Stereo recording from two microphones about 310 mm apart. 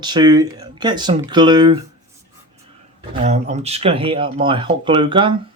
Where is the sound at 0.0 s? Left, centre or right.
Centre.